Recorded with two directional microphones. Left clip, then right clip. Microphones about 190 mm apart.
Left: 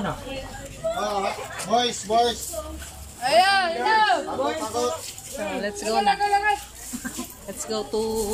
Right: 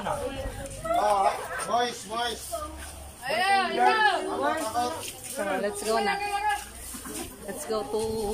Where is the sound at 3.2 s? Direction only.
65° left (ahead or behind).